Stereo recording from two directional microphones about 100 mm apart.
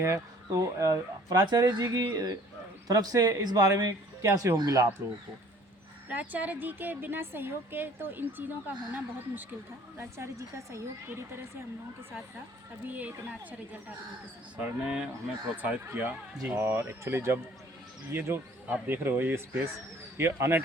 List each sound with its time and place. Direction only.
0.0 s a woman's voice: 30° right (ahead or behind)
4.5 s speech: 40° right (ahead or behind)
6.1 s a woman's voice: 15° right (ahead or behind); by 10.8 s 30° right (ahead or behind)
12.9 s a woman's voice: 15° right (ahead or behind)